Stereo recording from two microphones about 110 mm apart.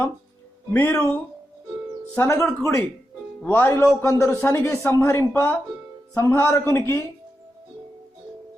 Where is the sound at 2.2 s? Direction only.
20° left (ahead or behind).